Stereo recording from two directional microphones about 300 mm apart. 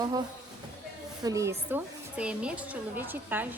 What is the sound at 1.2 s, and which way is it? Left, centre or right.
Speech, centre.